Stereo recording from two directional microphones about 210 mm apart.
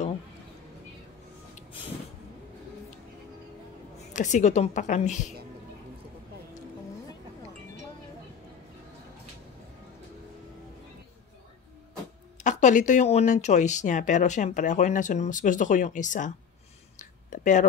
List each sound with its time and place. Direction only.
4.1 s speech: 35° left (ahead or behind)
12.4 s speech: 35° left (ahead or behind)
17.0 s a sound: 35° left (ahead or behind)